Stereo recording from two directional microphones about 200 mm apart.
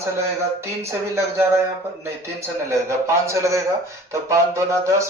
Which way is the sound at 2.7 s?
15° right (ahead or behind).